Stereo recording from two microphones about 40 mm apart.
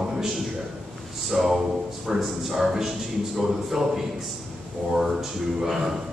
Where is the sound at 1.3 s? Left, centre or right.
Centre.